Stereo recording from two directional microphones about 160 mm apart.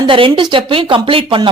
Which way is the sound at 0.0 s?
35° right (ahead or behind).